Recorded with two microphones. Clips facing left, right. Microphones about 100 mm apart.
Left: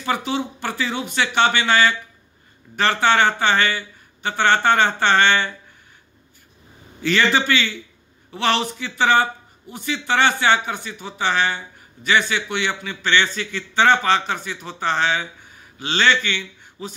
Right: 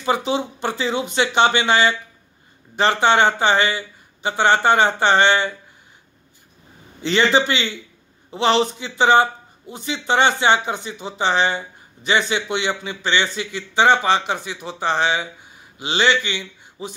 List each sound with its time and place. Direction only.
0.0 s speech: 20° right (ahead or behind)
7.0 s a man's voice: 20° right (ahead or behind)